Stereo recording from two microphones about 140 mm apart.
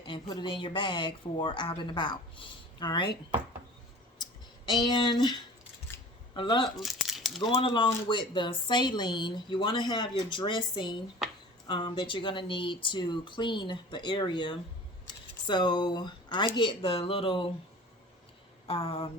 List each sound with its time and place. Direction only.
0.0 s speech: 35° left (ahead or behind)
4.2 s a sound: 30° left (ahead or behind)
6.3 s speech: 35° left (ahead or behind)
6.7 s speech: centre (ahead or behind)
7.4 s speech: 40° left (ahead or behind)
18.7 s speech: 40° left (ahead or behind)